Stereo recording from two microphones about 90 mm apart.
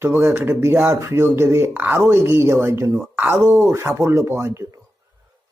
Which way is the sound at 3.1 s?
20° right (ahead or behind).